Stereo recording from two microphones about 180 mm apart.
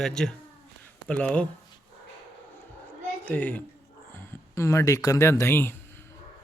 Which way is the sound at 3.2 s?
10° left (ahead or behind).